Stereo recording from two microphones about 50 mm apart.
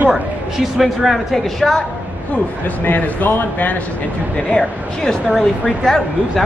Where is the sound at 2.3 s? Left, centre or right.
Left.